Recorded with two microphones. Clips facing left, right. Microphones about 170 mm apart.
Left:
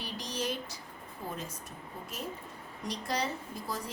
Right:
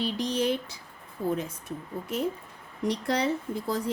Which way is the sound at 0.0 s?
60° right (ahead or behind).